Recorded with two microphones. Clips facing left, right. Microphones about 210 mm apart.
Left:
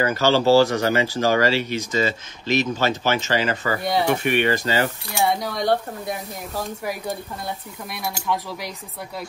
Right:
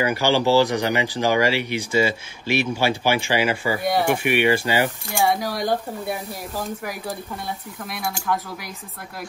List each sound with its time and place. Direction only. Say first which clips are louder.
0.0 s speech: left 1 dB; 15° right (ahead or behind)
4.2 s speech: right 1 dB; 15° right (ahead or behind)